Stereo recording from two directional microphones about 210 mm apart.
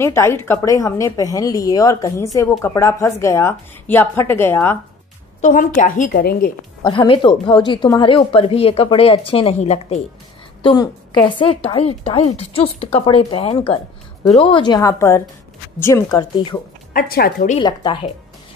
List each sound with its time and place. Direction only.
0.0 s a woman's voice: 10° left (ahead or behind)
5.4 s a woman's voice: 40° left (ahead or behind)
6.8 s speech: 25° left (ahead or behind)
10.6 s a woman's voice: 20° left (ahead or behind)
16.9 s a woman's voice: 45° left (ahead or behind)
17.6 s speech: 20° left (ahead or behind)